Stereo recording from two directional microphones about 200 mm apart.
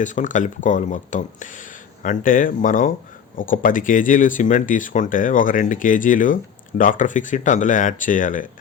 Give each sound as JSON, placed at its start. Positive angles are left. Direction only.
{"t": 0.0, "sound": "speech", "side_deg": 40}